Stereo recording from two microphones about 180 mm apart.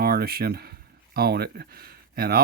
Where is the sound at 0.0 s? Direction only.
60° right (ahead or behind).